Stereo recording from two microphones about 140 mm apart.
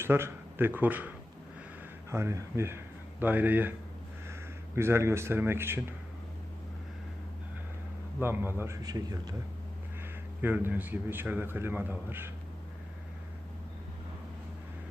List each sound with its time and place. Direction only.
0.0 s a man's voice: 15° right (ahead or behind)
8.2 s a man's voice: 15° right (ahead or behind)
10.4 s a man's voice: 15° right (ahead or behind)